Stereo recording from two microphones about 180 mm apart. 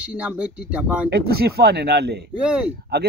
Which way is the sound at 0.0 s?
5° right (ahead or behind).